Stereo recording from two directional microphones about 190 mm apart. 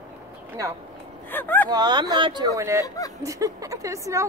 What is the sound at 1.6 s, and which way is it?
A woman's voice, 20° right (ahead or behind).